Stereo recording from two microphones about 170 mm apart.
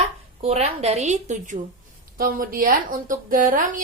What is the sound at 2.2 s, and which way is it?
A woman's voice, 55° right (ahead or behind).